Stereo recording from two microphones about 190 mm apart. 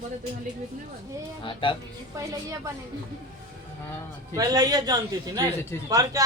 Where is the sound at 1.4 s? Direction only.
25° left (ahead or behind).